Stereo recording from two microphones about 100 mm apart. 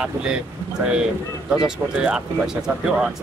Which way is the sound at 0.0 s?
10° right (ahead or behind).